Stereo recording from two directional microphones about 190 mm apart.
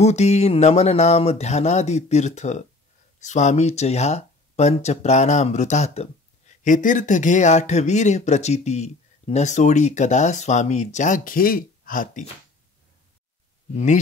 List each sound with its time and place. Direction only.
0.0 s speech: 35° left (ahead or behind)